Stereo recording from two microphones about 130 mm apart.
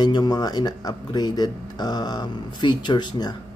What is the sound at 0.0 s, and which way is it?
Speech, 30° left (ahead or behind).